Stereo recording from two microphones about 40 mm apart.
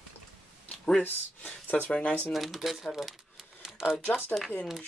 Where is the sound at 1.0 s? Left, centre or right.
Left.